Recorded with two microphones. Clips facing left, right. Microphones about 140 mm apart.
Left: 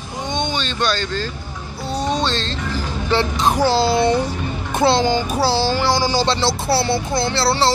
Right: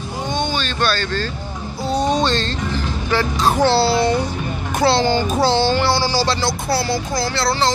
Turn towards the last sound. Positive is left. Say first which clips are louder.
# left 1 dB
turn(degrees=30)  # may be behind; listen again after turning